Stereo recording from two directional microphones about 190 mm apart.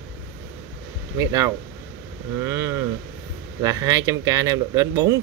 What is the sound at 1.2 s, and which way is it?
Speech, 15° right (ahead or behind).